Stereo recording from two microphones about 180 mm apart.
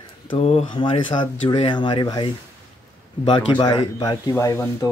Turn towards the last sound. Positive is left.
turn(degrees=15)  # may be behind; listen again after turning